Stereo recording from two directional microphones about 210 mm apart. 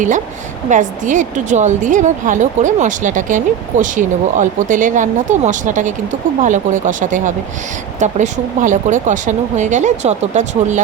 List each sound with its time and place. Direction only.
0.7 s a woman's voice: 35° right (ahead or behind)